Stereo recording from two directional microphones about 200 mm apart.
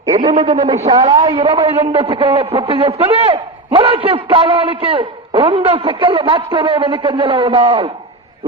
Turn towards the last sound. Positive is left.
turn(degrees=-25)  # may be behind; listen again after turning